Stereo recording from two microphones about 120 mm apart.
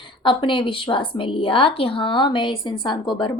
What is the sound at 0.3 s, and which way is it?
A woman's voice, 45° left (ahead or behind).